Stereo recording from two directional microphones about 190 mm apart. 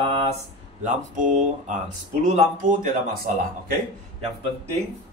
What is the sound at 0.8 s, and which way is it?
Speech, 40° right (ahead or behind).